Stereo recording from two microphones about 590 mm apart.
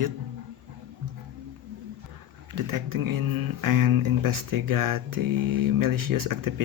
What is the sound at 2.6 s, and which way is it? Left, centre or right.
Speech, right.